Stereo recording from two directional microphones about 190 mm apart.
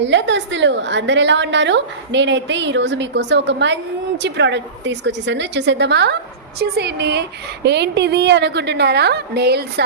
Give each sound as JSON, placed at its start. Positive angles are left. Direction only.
{"t": 0.0, "sound": "a woman's voice", "side_deg": -70}